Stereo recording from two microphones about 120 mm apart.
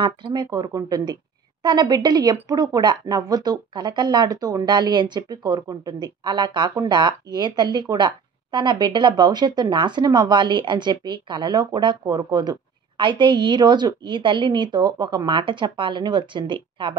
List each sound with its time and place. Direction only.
0.0 s a woman's voice: 40° right (ahead or behind)